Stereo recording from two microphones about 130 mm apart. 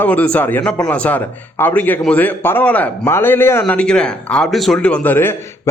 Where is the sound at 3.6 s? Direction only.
5° left (ahead or behind).